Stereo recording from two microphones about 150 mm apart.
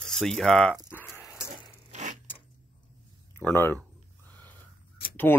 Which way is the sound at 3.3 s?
15° left (ahead or behind).